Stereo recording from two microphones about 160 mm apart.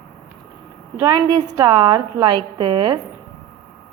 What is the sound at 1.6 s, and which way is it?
A woman's voice, 30° right (ahead or behind).